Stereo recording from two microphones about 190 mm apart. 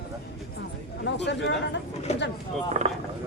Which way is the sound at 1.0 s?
65° left (ahead or behind).